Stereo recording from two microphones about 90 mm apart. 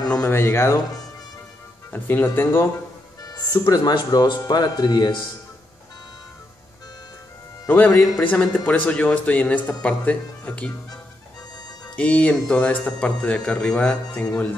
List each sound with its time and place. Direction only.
0.2 s speech: 25° left (ahead or behind)
1.9 s speech: 20° left (ahead or behind)
3.2 s speech: 45° left (ahead or behind)
7.6 s a man's voice: 20° left (ahead or behind)
11.9 s a man's voice: 15° left (ahead or behind)